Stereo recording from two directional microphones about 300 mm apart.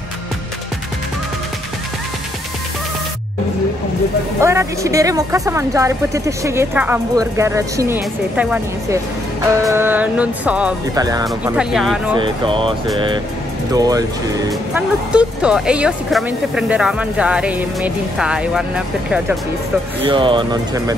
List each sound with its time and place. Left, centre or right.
4.4 s speech: centre
11.2 s speech: centre
12.2 s speech: centre
15.1 s speech: centre
20.0 s speech: centre